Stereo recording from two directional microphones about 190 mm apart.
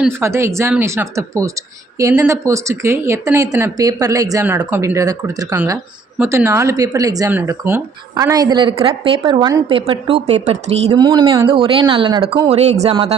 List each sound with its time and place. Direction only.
0.0 s speech: 15° right (ahead or behind); by 10.9 s 35° right (ahead or behind)
10.9 s speech: 20° right (ahead or behind)